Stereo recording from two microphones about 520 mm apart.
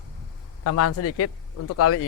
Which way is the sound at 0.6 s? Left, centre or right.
Left.